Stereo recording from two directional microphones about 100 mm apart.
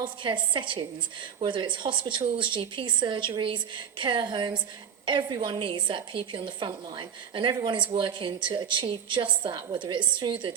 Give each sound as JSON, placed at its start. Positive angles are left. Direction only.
{"t": 0.0, "sound": "a woman's voice", "side_deg": -55}